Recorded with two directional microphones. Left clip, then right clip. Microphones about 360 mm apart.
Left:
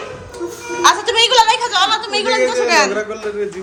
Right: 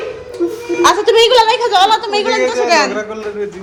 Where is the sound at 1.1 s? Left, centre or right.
Centre.